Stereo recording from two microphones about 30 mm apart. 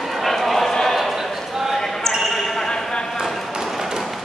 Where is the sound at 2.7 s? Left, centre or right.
Left.